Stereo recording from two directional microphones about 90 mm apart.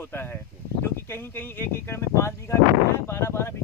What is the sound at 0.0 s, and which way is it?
Speech, 25° left (ahead or behind).